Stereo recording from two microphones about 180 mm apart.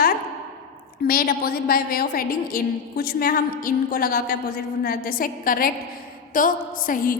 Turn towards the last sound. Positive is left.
turn(degrees=50)  # may be behind; listen again after turning